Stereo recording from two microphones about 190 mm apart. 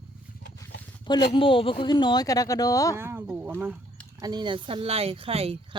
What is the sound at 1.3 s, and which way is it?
Speech, 25° left (ahead or behind).